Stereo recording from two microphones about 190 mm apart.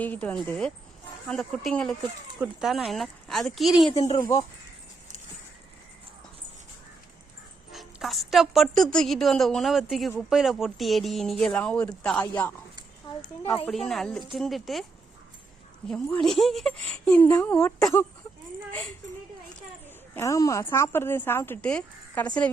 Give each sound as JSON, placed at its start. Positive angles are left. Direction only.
{"t": 0.0, "sound": "a woman's voice", "side_deg": 10}
{"t": 3.9, "sound": "speech", "side_deg": 30}
{"t": 4.2, "sound": "a woman's voice", "side_deg": 20}
{"t": 7.7, "sound": "a woman's voice", "side_deg": 0}
{"t": 13.7, "sound": "a woman's voice", "side_deg": 0}
{"t": 15.9, "sound": "a woman's voice", "side_deg": 5}
{"t": 20.1, "sound": "a woman's voice", "side_deg": 15}